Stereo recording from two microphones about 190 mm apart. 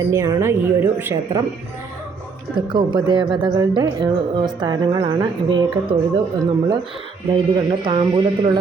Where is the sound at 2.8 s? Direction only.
25° right (ahead or behind).